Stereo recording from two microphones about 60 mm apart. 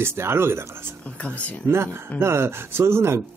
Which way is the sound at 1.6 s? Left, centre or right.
Right.